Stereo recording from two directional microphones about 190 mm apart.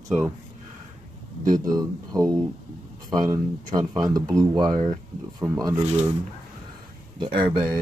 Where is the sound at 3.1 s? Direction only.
20° right (ahead or behind).